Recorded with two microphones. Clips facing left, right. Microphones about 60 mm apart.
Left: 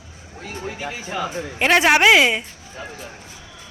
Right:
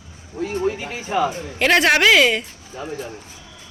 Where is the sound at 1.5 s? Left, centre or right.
Centre.